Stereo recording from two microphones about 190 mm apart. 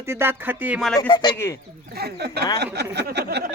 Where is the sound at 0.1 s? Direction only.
10° right (ahead or behind).